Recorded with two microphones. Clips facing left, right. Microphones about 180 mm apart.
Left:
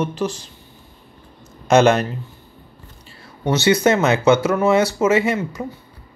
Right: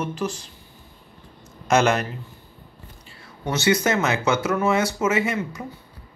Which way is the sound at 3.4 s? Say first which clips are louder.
Left 5 dB; 30° left (ahead or behind).